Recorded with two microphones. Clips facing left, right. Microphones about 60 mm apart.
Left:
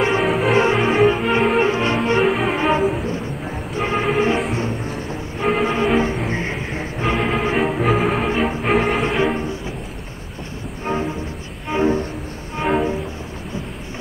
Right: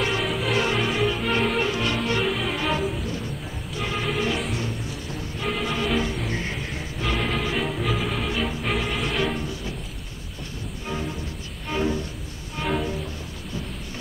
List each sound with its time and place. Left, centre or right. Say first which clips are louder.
0.0 s music: left 8 dB; left
1.2 s music: left 7 dB; left
2.8 s music: left 8 dB; left
3.7 s music: left 8 dB; left
9.1 s music: left 6 dB; left
11.7 s music: left 7 dB; left